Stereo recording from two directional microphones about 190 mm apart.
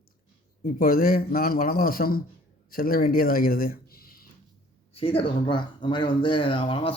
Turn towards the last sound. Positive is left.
turn(degrees=30)  # may be behind; listen again after turning